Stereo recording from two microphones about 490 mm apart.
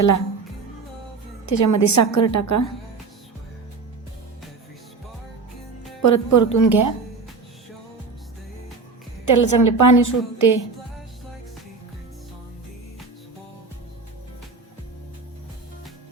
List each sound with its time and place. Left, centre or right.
1.5 s a woman's voice: left
6.0 s a woman's voice: left
9.2 s a woman's voice: left